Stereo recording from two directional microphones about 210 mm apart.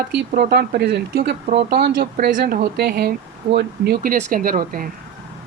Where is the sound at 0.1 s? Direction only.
50° right (ahead or behind).